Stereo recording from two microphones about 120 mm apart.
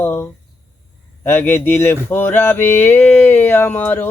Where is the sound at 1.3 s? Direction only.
15° left (ahead or behind).